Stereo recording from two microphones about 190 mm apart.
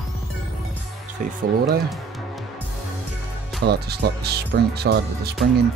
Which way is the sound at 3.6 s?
60° right (ahead or behind).